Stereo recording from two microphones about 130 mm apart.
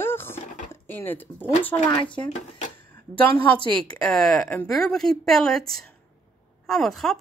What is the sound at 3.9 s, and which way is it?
Speech, 5° left (ahead or behind).